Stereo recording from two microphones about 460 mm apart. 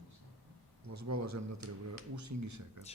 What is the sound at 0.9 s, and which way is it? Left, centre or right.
Speech, right.